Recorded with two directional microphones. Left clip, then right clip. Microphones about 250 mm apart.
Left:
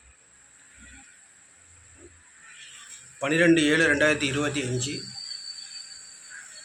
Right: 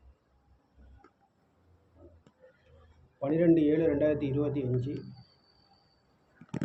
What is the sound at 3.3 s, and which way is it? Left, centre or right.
A man's voice, centre.